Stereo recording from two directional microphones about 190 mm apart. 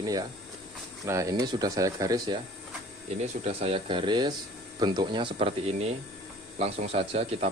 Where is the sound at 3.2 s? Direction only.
30° right (ahead or behind).